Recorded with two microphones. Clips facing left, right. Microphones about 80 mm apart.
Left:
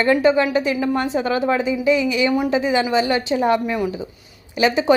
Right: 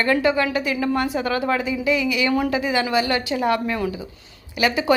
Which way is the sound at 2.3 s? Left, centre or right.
Centre.